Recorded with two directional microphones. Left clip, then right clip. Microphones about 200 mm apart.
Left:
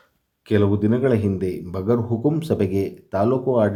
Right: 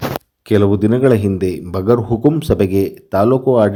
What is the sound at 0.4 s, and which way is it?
A man's voice, 30° right (ahead or behind).